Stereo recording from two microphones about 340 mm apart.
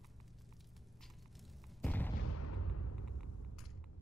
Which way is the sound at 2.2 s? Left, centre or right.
Left.